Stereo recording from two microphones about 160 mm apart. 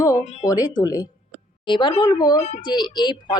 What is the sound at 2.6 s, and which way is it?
Speech, 30° left (ahead or behind).